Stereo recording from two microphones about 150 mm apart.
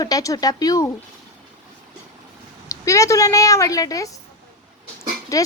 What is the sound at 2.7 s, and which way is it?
A woman's voice, 20° left (ahead or behind).